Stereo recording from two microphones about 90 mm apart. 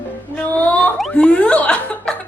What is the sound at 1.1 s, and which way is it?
A woman's voice, 10° left (ahead or behind).